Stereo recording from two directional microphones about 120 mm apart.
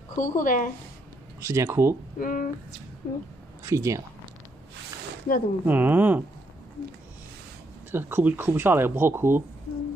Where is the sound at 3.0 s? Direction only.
90° left.